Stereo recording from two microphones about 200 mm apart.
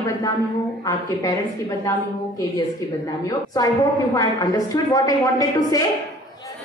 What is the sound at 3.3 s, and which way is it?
A woman's voice, 20° left (ahead or behind).